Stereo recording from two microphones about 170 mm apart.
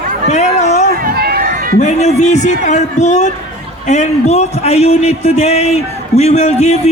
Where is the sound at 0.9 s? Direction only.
65° right (ahead or behind).